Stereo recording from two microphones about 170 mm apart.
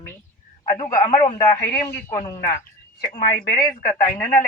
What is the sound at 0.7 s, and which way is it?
A man's voice, 20° left (ahead or behind).